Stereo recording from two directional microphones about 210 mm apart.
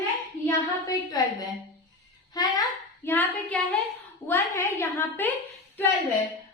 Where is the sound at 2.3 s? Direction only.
20° left (ahead or behind).